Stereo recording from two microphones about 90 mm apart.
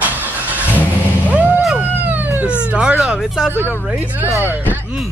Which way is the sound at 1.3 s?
20° right (ahead or behind).